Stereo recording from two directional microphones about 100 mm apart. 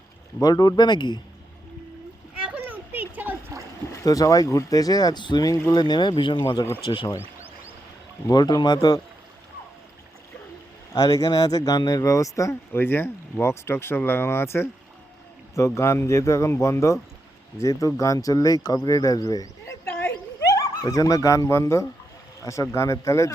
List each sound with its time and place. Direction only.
0.4 s speech: 40° left (ahead or behind)
2.4 s children playing: 15° right (ahead or behind)
3.9 s speech: 35° left (ahead or behind); by 7.1 s 55° left (ahead or behind)
8.3 s speech: 40° left (ahead or behind)
10.9 s speech: 35° left (ahead or behind)
19.8 s a sound: 20° left (ahead or behind)
20.6 s speech: 35° left (ahead or behind)